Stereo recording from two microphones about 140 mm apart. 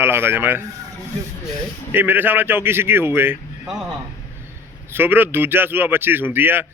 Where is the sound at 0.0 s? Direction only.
15° right (ahead or behind).